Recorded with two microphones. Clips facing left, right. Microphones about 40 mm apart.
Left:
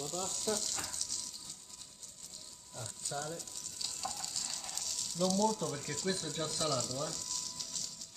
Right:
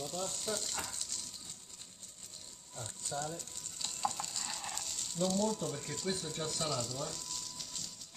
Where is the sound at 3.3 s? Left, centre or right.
Right.